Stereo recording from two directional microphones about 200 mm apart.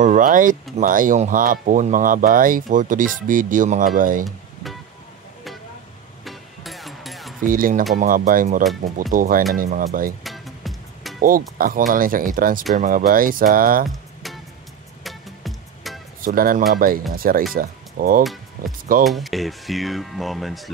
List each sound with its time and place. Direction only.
0.0 s speech: 40° right (ahead or behind)
6.2 s music: centre (ahead or behind)
7.4 s speech: 45° right (ahead or behind)
10.2 s music: centre (ahead or behind)
11.1 s speech: 45° right (ahead or behind)
13.8 s music: centre (ahead or behind)
16.2 s speech: 45° right (ahead or behind)
19.0 s speech: centre (ahead or behind)